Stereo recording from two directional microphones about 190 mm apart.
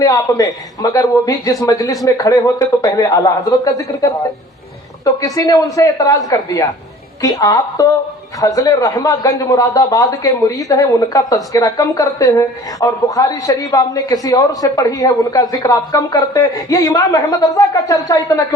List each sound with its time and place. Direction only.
0.0 s a woman's voice: 20° left (ahead or behind)
5.2 s a woman's voice: 20° left (ahead or behind)